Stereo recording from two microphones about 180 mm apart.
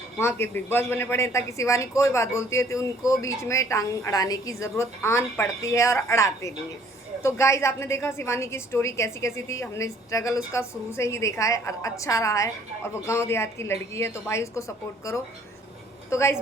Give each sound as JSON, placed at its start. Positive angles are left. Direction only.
{"t": 0.2, "sound": "a man's voice", "side_deg": 15}
{"t": 16.0, "sound": "a man's voice", "side_deg": 15}